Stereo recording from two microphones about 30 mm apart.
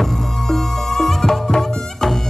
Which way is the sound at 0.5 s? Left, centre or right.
Centre.